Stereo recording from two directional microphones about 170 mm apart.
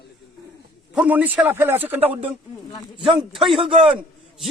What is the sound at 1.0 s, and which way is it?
Speech, 10° right (ahead or behind).